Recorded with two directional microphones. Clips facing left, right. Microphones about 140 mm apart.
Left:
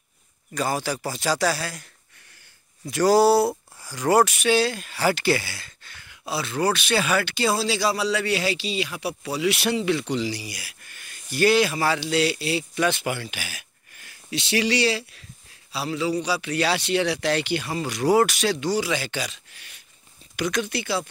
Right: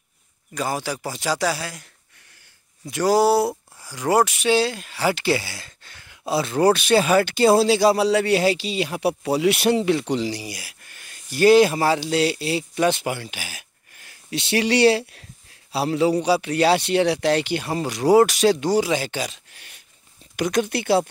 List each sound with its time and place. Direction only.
0.6 s speech: 15° right (ahead or behind)
2.9 s speech: 15° right (ahead or behind)
5.0 s a sound: 20° right (ahead or behind)
6.4 s speech: 40° right (ahead or behind)
14.3 s speech: 50° right (ahead or behind)